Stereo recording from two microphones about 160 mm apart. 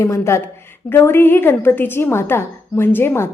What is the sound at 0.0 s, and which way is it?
A woman's voice, 20° left (ahead or behind).